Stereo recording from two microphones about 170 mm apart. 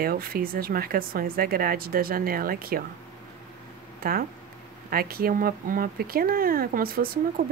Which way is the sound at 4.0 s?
60° right (ahead or behind).